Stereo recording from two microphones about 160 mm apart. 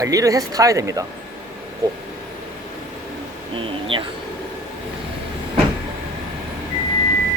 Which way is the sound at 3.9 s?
35° right (ahead or behind).